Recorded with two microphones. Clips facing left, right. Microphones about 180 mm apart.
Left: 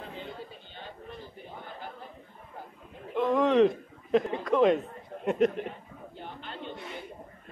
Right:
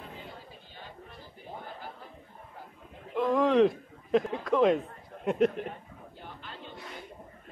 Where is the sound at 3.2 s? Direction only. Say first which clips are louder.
Left 1 dB; centre (ahead or behind).